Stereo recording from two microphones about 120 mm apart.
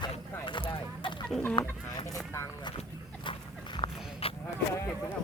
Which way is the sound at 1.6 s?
35° left (ahead or behind).